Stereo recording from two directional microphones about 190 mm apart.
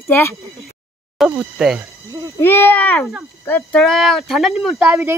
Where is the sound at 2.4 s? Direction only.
10° left (ahead or behind).